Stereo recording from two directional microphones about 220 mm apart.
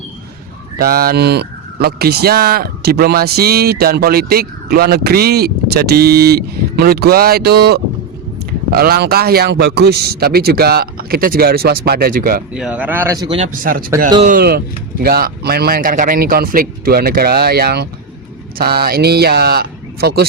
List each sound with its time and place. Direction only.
0.8 s speech: 45° right (ahead or behind)
12.5 s speech: 5° right (ahead or behind)
13.4 s speech: 40° right (ahead or behind)